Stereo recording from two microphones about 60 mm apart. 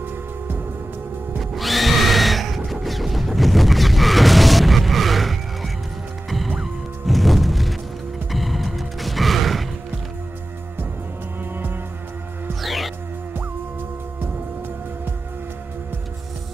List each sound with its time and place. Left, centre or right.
1.4 s music: centre
11.5 s music: right
12.6 s music: centre